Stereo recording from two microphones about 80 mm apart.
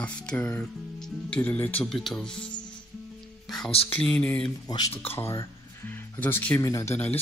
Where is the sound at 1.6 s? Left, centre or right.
Centre.